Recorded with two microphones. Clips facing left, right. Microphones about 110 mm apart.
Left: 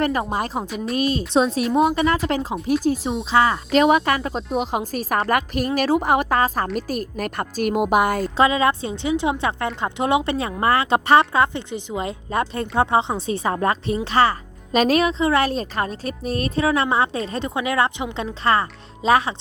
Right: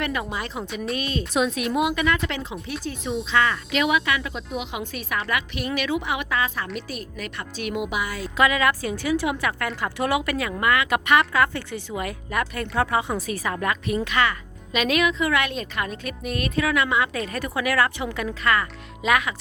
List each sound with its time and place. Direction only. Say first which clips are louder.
0.0 s a woman's voice: left 6 dB; 35° left (ahead or behind)
1.3 s a woman's voice: left 3 dB; 30° left (ahead or behind); by 8.2 s 50° left (ahead or behind)
8.4 s speech: left 2 dB; 30° left (ahead or behind)